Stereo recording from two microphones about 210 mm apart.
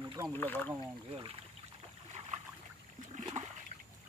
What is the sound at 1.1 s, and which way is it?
Speech, 25° right (ahead or behind).